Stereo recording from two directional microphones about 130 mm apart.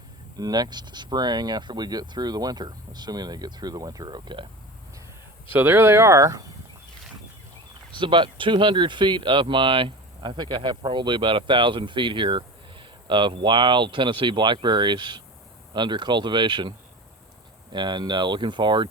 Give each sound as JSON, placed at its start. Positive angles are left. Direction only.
{"t": 0.3, "sound": "speech", "side_deg": -30}
{"t": 5.5, "sound": "speech", "side_deg": -15}
{"t": 7.9, "sound": "speech", "side_deg": -40}